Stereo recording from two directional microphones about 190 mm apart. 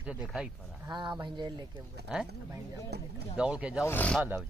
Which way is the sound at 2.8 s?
60° right (ahead or behind).